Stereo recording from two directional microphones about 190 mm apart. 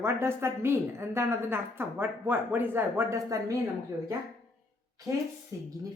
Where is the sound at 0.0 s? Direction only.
15° right (ahead or behind).